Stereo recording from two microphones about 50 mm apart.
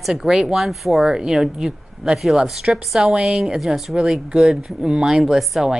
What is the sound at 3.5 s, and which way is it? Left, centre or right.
Speech, centre.